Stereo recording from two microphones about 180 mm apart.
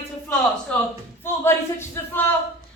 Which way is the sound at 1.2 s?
15° left (ahead or behind).